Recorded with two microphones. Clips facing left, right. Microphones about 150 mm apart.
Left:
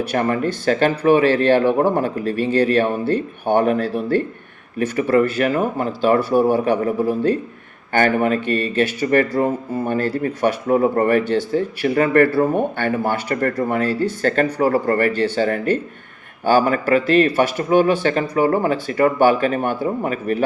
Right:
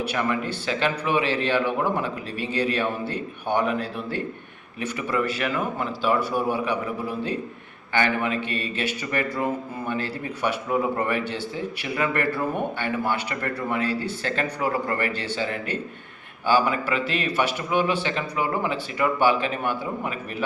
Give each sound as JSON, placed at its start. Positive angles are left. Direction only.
{"t": 0.1, "sound": "speech", "side_deg": 45}